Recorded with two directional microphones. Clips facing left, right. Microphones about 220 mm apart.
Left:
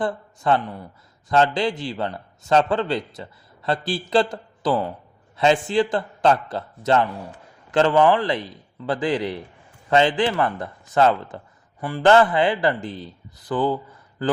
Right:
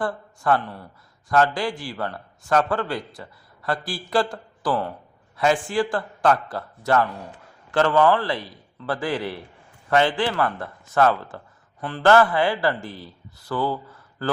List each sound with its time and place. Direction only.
0.0 s a man's voice: 20° left (ahead or behind)